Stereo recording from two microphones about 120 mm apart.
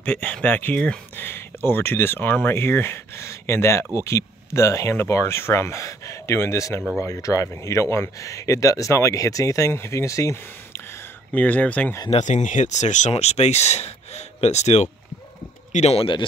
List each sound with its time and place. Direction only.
0.0 s speech: 10° left (ahead or behind)
12.1 s speech: 80° left; by 16.3 s 45° left (ahead or behind)